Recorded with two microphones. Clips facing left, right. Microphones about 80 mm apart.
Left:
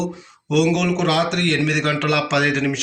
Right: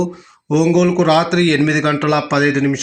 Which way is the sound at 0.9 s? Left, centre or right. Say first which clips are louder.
Right 7 dB; right.